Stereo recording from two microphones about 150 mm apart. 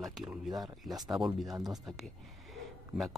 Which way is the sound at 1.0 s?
Centre (ahead or behind).